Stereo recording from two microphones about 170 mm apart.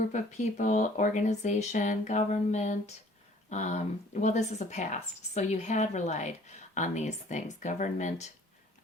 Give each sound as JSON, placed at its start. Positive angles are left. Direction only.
{"t": 0.1, "sound": "speech", "side_deg": 45}